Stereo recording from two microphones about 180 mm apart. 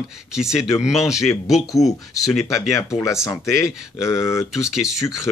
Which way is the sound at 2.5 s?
15° left (ahead or behind).